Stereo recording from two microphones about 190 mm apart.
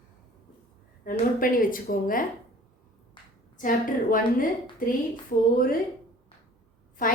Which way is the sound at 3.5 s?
45° left (ahead or behind).